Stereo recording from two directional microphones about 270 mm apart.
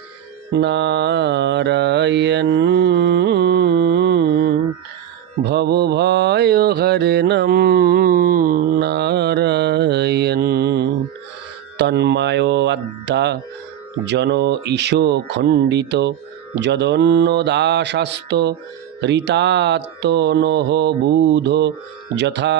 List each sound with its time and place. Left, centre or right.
0.5 s mantra: right
11.8 s music: right
14.1 s mantra: right